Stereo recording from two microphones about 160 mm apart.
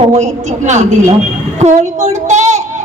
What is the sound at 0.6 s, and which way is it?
Speech, 45° right (ahead or behind).